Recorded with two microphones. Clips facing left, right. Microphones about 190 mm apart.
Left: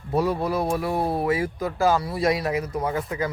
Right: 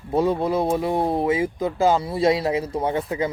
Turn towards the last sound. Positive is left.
turn(degrees=-25)  # may be behind; listen again after turning